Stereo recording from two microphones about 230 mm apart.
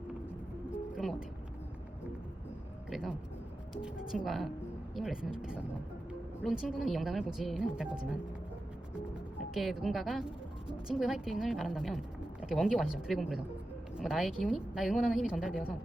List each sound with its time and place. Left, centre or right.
2.9 s a woman's voice: centre
9.6 s a woman's voice: centre